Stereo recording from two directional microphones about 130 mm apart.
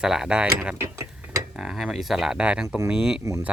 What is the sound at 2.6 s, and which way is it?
Speech, 20° right (ahead or behind).